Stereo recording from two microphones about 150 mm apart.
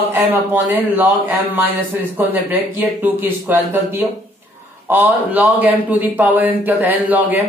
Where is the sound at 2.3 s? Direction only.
15° right (ahead or behind).